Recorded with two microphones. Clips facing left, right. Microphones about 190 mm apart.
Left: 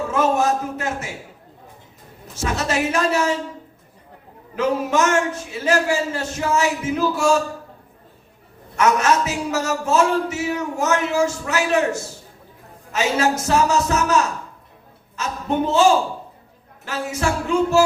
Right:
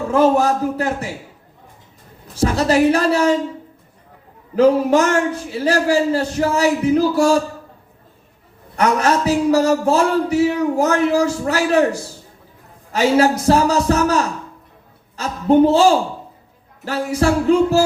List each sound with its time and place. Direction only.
0.1 s a man's voice: 35° right (ahead or behind)
2.3 s a man's voice: 35° right (ahead or behind)
4.5 s a man's voice: 35° right (ahead or behind)
8.7 s a man's voice: 35° right (ahead or behind)